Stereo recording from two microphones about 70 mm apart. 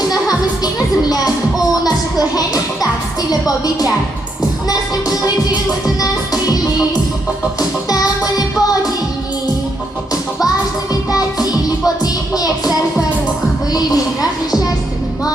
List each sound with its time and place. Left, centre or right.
0.3 s music: left
7.9 s music: left
11.1 s music: left